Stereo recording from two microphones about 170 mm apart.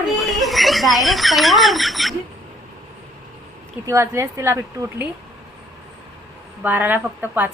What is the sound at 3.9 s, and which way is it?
Speech, 15° right (ahead or behind).